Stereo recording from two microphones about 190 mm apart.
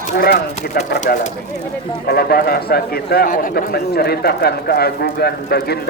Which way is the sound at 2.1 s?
55° left (ahead or behind).